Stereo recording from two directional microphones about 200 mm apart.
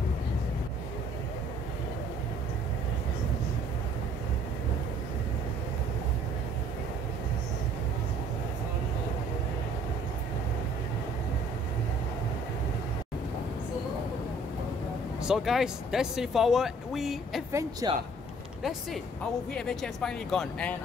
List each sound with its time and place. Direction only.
15.2 s speech: centre (ahead or behind)
17.5 s speech: 15° right (ahead or behind)
19.5 s speech: centre (ahead or behind)